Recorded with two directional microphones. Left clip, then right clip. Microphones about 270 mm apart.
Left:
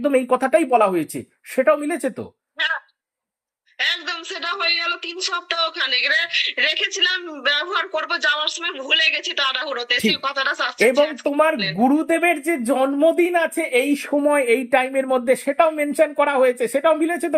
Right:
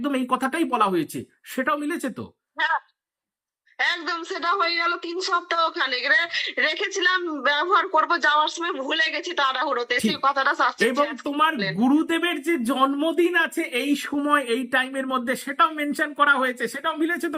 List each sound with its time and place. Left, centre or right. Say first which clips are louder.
0.0 s speech: left 6 dB; centre
3.8 s speech: left 2 dB; centre
14.4 s speech: left 6 dB; left